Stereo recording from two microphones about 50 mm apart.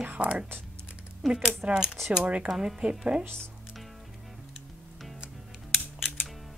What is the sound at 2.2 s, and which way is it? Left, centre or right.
Speech, right.